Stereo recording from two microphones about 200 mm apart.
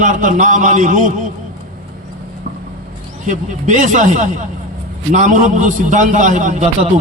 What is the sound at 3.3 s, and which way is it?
A man's voice, 35° right (ahead or behind).